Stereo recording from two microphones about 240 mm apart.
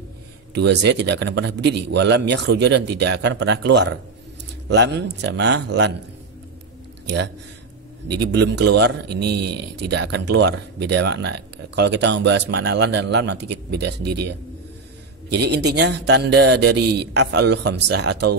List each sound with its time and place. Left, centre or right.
0.6 s speech: right
8.1 s speech: right